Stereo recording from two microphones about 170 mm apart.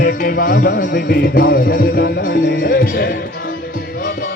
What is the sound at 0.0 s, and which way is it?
Music, 55° left (ahead or behind).